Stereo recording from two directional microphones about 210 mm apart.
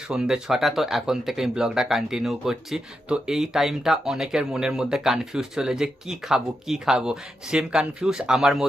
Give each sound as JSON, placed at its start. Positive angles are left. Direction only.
{"t": 0.1, "sound": "speech", "side_deg": -5}